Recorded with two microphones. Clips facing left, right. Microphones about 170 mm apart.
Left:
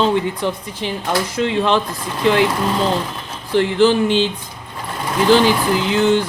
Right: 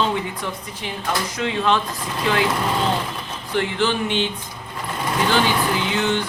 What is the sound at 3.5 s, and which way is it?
Speech, 35° left (ahead or behind).